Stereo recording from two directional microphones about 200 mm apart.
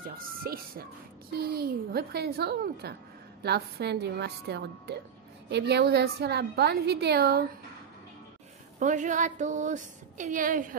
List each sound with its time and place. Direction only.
0.1 s a woman's voice: 45° right (ahead or behind)
8.7 s a woman's voice: 40° right (ahead or behind)